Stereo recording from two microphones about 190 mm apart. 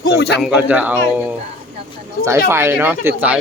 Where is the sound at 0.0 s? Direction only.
60° left (ahead or behind).